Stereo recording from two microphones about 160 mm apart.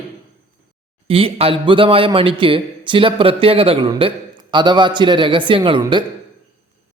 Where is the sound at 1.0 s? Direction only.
35° right (ahead or behind).